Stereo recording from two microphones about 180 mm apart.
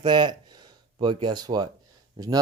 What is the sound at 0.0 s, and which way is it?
Speech, 25° right (ahead or behind).